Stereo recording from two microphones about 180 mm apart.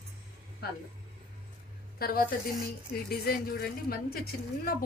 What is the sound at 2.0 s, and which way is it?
A woman's voice, 55° left (ahead or behind).